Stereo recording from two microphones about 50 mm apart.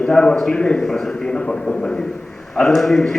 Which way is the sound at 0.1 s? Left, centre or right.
Centre.